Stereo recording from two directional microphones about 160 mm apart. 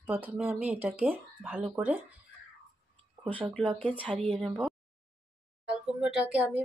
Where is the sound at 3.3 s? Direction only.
35° right (ahead or behind).